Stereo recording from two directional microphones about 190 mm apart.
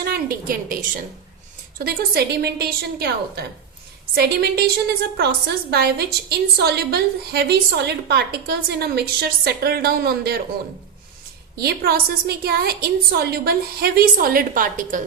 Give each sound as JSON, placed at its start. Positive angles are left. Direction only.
{"t": 0.0, "sound": "a sound", "side_deg": -50}
{"t": 1.8, "sound": "a woman's voice", "side_deg": -55}
{"t": 5.7, "sound": "a woman's voice", "side_deg": -55}
{"t": 11.5, "sound": "a woman's voice", "side_deg": -55}